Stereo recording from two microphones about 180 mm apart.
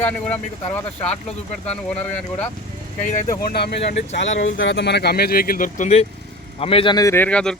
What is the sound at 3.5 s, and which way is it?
Speech, 65° left (ahead or behind).